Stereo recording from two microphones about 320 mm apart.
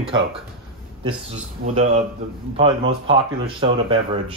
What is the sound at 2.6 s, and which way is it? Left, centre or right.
Speech, centre.